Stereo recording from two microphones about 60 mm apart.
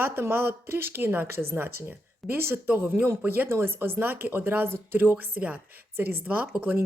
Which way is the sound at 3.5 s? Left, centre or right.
Right.